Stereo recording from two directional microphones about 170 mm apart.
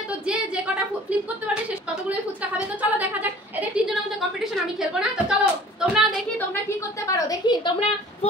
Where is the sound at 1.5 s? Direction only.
5° right (ahead or behind).